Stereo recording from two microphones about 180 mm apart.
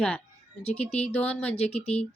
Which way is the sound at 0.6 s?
35° left (ahead or behind).